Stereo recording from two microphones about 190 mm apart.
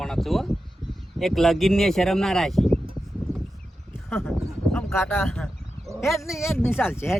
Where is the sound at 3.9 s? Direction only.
10° left (ahead or behind).